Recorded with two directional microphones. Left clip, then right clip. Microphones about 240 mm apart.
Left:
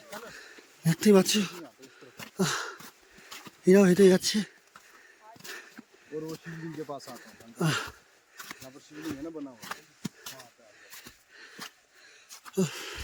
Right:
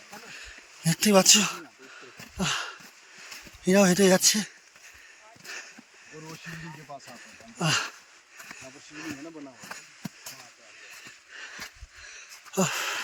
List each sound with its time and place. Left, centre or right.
0.3 s speech: centre
2.4 s a sound: centre
3.6 s speech: centre
6.5 s speech: centre
6.9 s speech: left
7.6 s speech: centre
11.3 s a sound: centre